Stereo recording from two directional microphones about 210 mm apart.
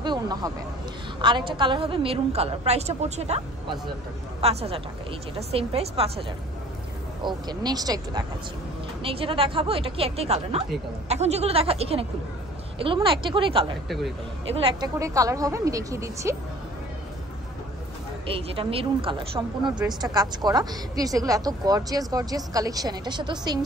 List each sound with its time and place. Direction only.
0.0 s a sound: 20° right (ahead or behind)
1.2 s a woman's voice: 20° right (ahead or behind)
7.2 s a woman's voice: 20° right (ahead or behind)
13.8 s a man's voice: centre (ahead or behind)
14.5 s a woman's voice: 25° right (ahead or behind)
18.2 s a woman's voice: 25° right (ahead or behind)